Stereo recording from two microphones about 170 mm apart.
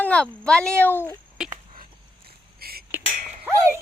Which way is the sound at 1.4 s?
5° right (ahead or behind).